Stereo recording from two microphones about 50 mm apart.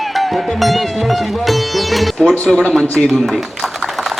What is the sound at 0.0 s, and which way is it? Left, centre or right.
Music, centre.